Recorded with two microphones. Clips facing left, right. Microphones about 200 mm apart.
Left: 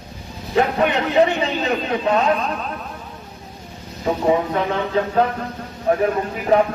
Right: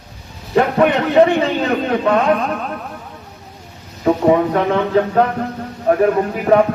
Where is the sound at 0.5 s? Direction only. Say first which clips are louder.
Right 4 dB; 50° right (ahead or behind).